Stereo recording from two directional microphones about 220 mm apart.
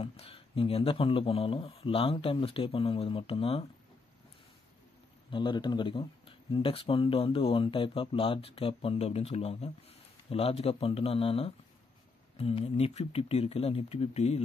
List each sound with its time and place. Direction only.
0.0 s speech: 25° left (ahead or behind)
5.3 s speech: 20° left (ahead or behind)